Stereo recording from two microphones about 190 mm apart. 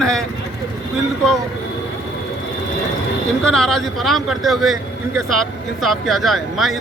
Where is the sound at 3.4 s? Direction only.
Centre (ahead or behind).